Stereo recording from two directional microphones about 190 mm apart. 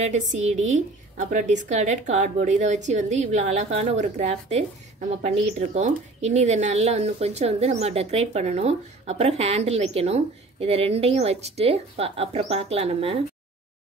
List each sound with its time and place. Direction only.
0.0 s speech: 35° right (ahead or behind)